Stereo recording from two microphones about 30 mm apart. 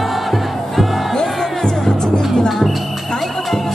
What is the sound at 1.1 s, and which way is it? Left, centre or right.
Music, centre.